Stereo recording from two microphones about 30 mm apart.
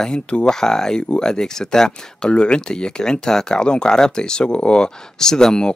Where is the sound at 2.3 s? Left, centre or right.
Left.